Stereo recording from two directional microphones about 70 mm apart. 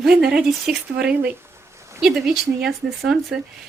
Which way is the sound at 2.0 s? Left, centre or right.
Centre.